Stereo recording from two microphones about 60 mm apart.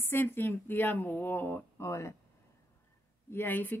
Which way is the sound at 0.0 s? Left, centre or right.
Left.